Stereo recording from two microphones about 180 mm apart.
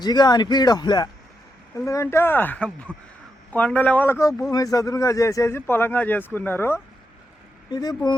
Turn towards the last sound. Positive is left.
turn(degrees=20)  # may be behind; listen again after turning